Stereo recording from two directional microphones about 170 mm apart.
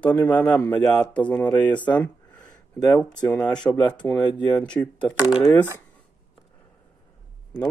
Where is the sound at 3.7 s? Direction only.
25° left (ahead or behind).